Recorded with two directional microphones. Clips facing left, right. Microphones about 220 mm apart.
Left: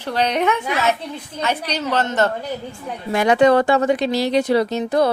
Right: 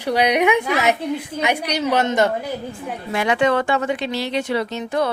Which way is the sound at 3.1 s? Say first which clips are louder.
Left 5 dB; 40° left (ahead or behind).